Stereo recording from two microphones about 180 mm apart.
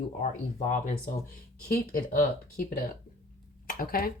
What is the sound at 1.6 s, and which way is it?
Speech, 55° left (ahead or behind).